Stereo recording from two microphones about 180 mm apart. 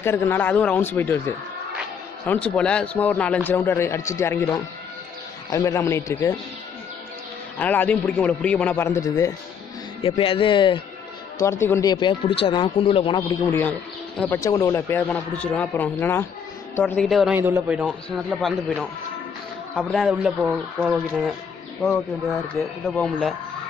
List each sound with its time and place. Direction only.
0.0 s a man's voice: 15° left (ahead or behind)
7.5 s a man's voice: 10° left (ahead or behind)
10.0 s speech: 30° left (ahead or behind)
13.5 s a man's voice: 10° left (ahead or behind)
17.4 s a man's voice: 10° right (ahead or behind)
19.8 s a man's voice: centre (ahead or behind)
22.9 s a man's voice: centre (ahead or behind)